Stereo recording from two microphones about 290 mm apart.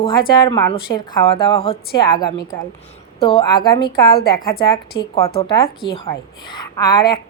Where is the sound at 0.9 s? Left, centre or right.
Centre.